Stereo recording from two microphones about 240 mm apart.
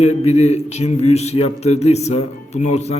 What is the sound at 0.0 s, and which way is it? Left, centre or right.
A man's voice, left.